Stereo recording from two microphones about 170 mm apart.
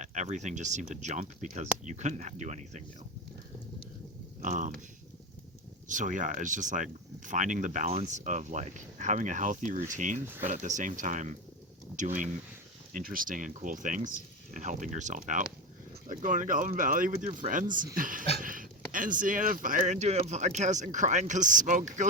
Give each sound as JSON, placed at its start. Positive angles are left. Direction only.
{"t": 0.0, "sound": "speech", "side_deg": -45}
{"t": 4.4, "sound": "speech", "side_deg": -45}
{"t": 5.9, "sound": "speech", "side_deg": -50}
{"t": 10.2, "sound": "speech", "side_deg": -10}
{"t": 10.5, "sound": "speech", "side_deg": -45}